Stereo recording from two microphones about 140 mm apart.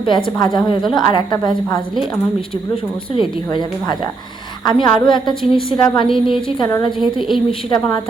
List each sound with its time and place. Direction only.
0.0 s a woman's voice: 35° left (ahead or behind)
3.2 s a woman's voice: 35° left (ahead or behind)
7.0 s a woman's voice: centre (ahead or behind)